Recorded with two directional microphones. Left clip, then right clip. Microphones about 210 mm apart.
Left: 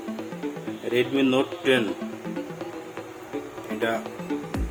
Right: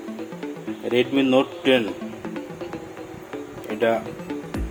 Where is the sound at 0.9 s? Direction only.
20° right (ahead or behind).